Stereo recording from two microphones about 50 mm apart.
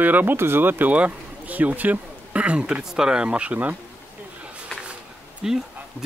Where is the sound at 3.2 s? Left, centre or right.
Right.